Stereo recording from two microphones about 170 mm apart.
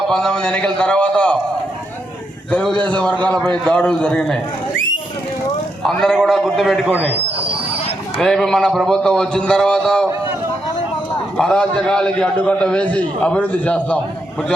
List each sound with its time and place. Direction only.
0.1 s a man's voice: 5° left (ahead or behind)
2.5 s a man's voice: 5° left (ahead or behind)
5.8 s a man's voice: 5° left (ahead or behind)
8.2 s a man's voice: 5° left (ahead or behind)
11.3 s a man's voice: 5° left (ahead or behind)